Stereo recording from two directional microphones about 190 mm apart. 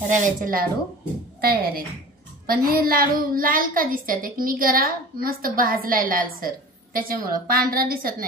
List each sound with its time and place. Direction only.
0.1 s a woman's voice: 45° right (ahead or behind)